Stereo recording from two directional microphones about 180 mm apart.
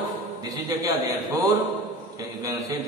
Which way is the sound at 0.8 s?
20° right (ahead or behind).